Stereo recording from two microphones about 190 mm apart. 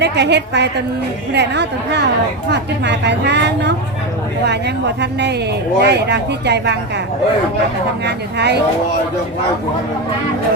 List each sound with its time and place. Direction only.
0.0 s a woman's voice: 65° right (ahead or behind)
8.0 s a woman's voice: 60° right (ahead or behind)